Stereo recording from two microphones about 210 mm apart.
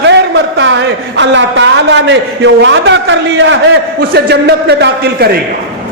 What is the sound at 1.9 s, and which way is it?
A man's voice, 60° right (ahead or behind).